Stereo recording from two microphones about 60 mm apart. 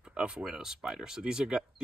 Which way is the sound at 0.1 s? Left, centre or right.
Centre.